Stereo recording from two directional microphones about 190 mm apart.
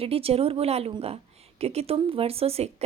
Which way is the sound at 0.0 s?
30° right (ahead or behind).